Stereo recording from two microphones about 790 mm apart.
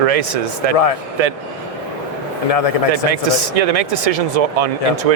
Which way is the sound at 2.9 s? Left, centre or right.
Right.